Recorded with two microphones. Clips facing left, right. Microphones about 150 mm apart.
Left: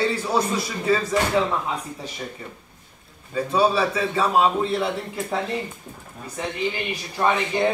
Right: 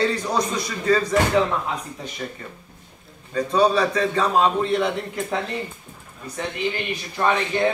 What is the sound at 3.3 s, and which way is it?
A man's voice, 5° left (ahead or behind).